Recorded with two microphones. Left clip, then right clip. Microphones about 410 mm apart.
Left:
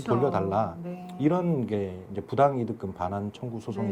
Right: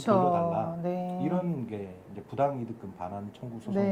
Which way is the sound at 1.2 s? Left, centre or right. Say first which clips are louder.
Left 6 dB; left.